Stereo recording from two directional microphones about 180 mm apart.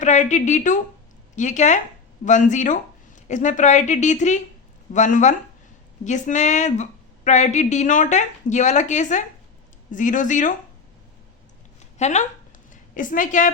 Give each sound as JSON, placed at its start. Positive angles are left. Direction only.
{"t": 0.0, "sound": "a woman's voice", "side_deg": 40}
{"t": 11.9, "sound": "a woman's voice", "side_deg": 40}